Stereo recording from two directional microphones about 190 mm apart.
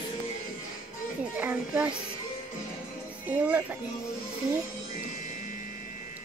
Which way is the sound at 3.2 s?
10° right (ahead or behind).